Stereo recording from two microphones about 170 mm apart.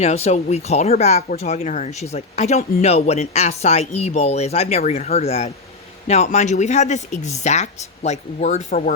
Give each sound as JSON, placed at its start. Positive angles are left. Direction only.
{"t": 0.0, "sound": "speech", "side_deg": 40}